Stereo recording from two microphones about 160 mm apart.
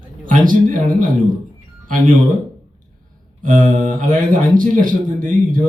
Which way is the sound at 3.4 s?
55° right (ahead or behind).